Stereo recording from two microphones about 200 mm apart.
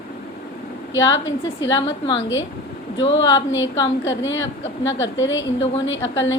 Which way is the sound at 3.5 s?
70° left (ahead or behind).